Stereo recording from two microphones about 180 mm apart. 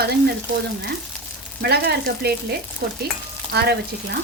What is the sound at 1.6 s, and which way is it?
A woman's voice, 65° right (ahead or behind).